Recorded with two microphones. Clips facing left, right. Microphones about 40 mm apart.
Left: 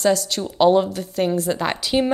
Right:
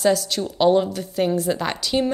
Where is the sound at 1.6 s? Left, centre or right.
Centre.